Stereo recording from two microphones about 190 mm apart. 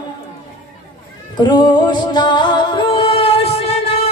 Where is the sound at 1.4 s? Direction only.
25° left (ahead or behind).